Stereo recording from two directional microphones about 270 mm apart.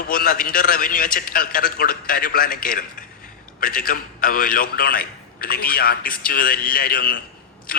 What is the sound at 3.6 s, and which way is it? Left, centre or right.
A man's voice, left.